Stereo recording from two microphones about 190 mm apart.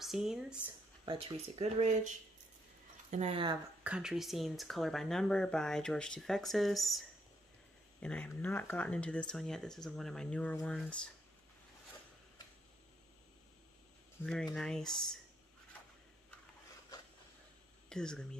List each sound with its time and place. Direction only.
0.0 s speech: centre (ahead or behind)
1.0 s speech: 30° right (ahead or behind)
3.8 s speech: 5° right (ahead or behind)
14.2 s speech: 5° left (ahead or behind)
17.8 s speech: 5° left (ahead or behind)